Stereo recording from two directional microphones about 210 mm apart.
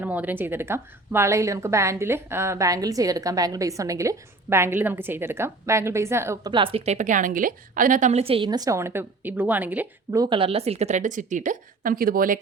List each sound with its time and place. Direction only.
0.0 s a woman's voice: 5° right (ahead or behind); by 12.4 s 40° right (ahead or behind)